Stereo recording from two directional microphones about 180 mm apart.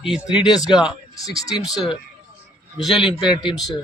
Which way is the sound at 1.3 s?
Centre (ahead or behind).